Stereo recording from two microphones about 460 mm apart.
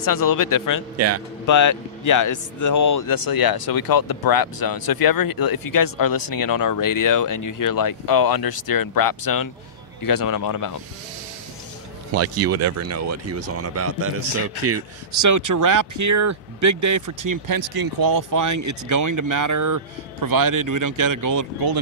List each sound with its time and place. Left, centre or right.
0.0 s speech: left
0.9 s speech: right
1.5 s speech: left
12.2 s speech: right